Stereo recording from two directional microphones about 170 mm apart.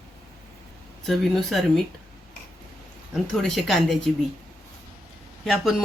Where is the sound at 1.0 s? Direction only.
Centre (ahead or behind).